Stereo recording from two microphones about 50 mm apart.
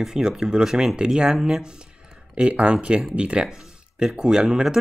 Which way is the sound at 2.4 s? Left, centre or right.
Right.